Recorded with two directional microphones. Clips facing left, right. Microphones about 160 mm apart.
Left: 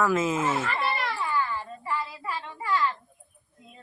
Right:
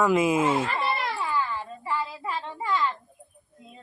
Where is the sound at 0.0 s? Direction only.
15° right (ahead or behind).